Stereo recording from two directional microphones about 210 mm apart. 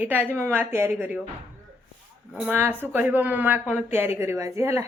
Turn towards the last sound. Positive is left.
turn(degrees=-15)  # may be behind; listen again after turning